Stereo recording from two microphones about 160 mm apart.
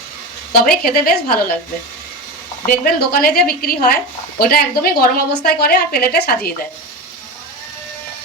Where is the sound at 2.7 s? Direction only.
65° left (ahead or behind).